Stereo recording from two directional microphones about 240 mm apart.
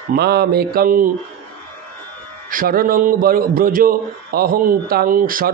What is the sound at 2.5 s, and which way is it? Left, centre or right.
Speech, right.